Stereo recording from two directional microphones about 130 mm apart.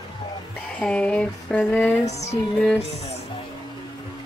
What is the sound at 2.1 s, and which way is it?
Music, 60° left (ahead or behind).